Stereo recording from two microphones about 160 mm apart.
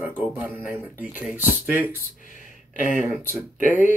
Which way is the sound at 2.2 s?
55° left (ahead or behind).